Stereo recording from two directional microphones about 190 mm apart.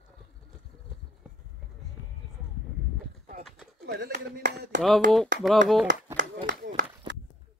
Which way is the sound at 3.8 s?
60° right (ahead or behind).